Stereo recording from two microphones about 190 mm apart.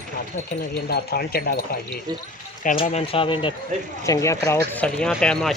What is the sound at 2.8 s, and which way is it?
Speech, 30° left (ahead or behind).